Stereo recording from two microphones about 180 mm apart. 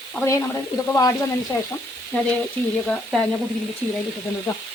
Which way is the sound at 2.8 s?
5° left (ahead or behind).